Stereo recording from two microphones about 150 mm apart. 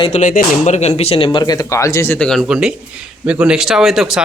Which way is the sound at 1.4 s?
25° left (ahead or behind).